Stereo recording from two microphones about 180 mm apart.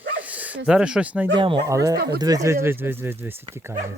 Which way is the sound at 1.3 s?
30° right (ahead or behind).